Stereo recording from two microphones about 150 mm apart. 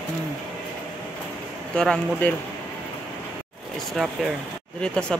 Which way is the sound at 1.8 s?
5° left (ahead or behind).